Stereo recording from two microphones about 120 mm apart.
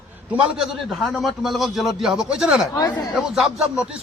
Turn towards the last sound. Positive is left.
turn(degrees=-5)  # may be behind; listen again after turning